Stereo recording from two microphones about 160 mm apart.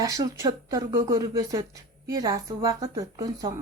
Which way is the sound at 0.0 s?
20° right (ahead or behind).